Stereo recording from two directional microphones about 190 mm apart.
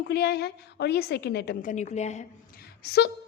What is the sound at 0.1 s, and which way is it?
A woman's voice, 55° left (ahead or behind).